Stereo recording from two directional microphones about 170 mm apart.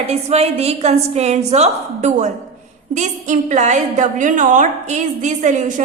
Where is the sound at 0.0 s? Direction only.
40° right (ahead or behind).